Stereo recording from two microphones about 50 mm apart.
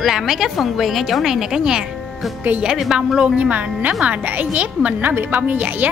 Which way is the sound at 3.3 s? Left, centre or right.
Right.